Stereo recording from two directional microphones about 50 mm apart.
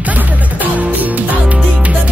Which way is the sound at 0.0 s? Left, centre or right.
Right.